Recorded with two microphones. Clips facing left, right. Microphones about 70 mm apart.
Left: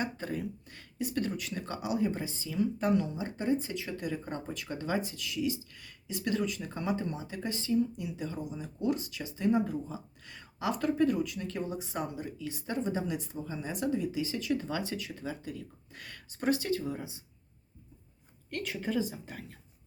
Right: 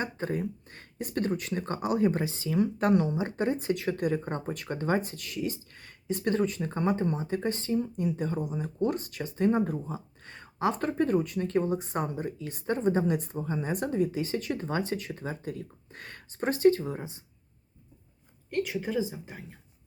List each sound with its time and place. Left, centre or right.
0.0 s speech: right
18.5 s a woman's voice: centre